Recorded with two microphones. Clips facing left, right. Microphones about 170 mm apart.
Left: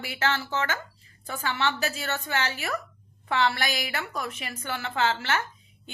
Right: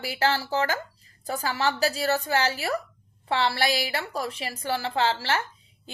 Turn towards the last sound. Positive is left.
turn(degrees=-30)  # may be behind; listen again after turning